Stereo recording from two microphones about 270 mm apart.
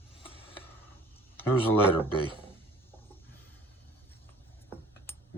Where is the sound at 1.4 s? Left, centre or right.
Centre.